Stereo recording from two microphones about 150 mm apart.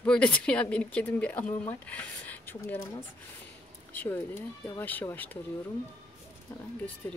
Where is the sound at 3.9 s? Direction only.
10° left (ahead or behind).